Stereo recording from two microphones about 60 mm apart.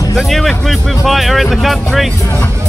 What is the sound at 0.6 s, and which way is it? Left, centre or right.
Speech, centre.